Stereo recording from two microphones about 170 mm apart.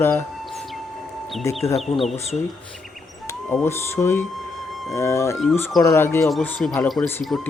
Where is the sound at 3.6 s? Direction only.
15° left (ahead or behind).